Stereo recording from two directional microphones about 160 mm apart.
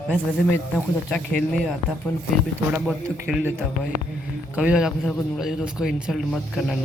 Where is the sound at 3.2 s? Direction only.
10° right (ahead or behind).